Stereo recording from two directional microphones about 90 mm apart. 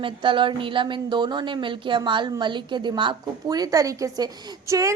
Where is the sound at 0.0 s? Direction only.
70° right (ahead or behind).